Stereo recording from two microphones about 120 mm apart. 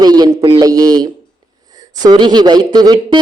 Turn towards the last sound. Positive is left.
turn(degrees=-35)  # may be behind; listen again after turning